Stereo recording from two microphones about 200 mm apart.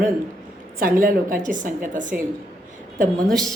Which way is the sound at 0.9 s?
45° right (ahead or behind).